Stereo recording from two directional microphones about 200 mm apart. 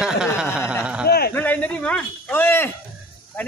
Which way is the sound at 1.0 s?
50° left (ahead or behind).